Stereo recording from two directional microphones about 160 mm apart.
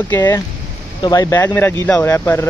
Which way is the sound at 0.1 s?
20° left (ahead or behind).